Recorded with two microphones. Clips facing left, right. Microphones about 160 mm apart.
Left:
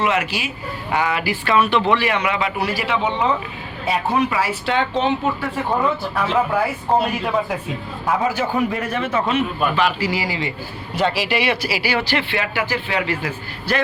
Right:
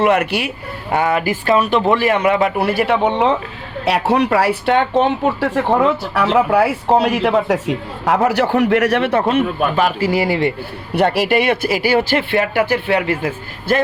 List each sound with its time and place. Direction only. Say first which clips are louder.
0.0 s speech: right 6 dB; 55° right (ahead or behind)
0.9 s speech: right 5 dB; 45° right (ahead or behind); by 3.3 s 60° right (ahead or behind)
3.8 s speech: right 4 dB; 80° right
4.3 s a man's voice: right 7 dB; 60° right (ahead or behind)